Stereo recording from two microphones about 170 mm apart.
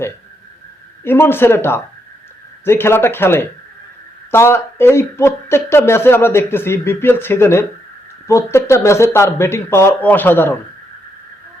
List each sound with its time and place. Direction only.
1.0 s speech: 15° left (ahead or behind)